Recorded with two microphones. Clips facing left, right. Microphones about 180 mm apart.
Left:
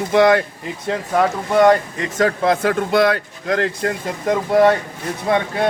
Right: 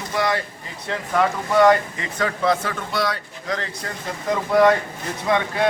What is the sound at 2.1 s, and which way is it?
Speech, 50° left (ahead or behind).